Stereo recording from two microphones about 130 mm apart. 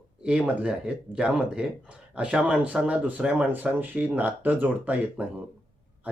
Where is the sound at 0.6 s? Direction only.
10° right (ahead or behind).